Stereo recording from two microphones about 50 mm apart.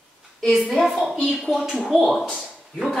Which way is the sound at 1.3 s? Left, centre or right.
Centre.